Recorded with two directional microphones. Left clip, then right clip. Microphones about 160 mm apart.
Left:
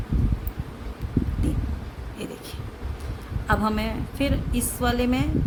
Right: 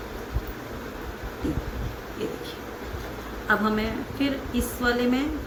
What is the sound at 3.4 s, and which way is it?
A woman's voice, 90° left.